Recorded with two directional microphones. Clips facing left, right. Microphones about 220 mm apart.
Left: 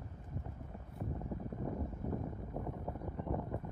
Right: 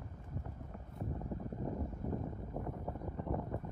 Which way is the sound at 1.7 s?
Centre (ahead or behind).